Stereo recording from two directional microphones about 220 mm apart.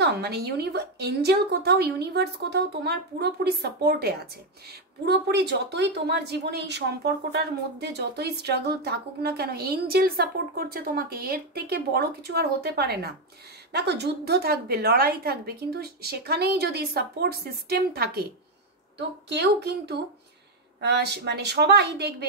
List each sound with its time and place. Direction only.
0.0 s speech: 50° right (ahead or behind)